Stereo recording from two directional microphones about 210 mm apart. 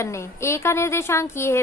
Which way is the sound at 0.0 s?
15° left (ahead or behind).